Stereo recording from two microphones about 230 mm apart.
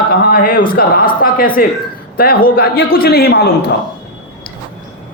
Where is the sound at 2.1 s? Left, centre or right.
Left.